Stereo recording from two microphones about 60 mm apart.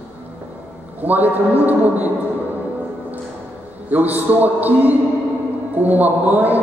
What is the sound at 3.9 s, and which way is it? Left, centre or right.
Speech, right.